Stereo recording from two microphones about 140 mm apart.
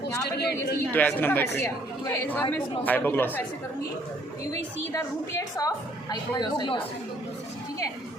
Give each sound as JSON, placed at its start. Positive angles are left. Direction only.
{"t": 0.1, "sound": "a woman's voice", "side_deg": 15}
{"t": 4.9, "sound": "a woman's voice", "side_deg": 20}